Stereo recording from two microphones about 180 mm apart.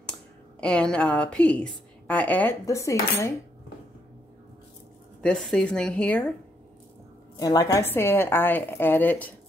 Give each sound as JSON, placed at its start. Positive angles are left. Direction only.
{"t": 0.6, "sound": "a woman's voice", "side_deg": 5}
{"t": 5.2, "sound": "a woman's voice", "side_deg": 5}
{"t": 7.3, "sound": "a woman's voice", "side_deg": 20}